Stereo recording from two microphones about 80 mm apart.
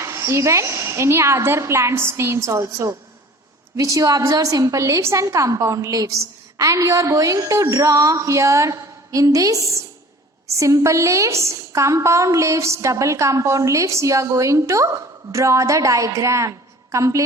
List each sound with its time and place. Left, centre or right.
0.0 s a woman's voice: right